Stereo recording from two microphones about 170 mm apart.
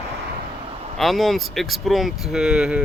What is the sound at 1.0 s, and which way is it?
Speech, centre (ahead or behind).